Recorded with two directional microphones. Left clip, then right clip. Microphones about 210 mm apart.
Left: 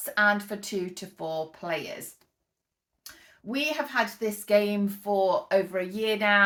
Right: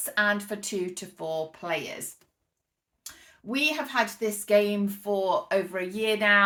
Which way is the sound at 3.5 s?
Centre (ahead or behind).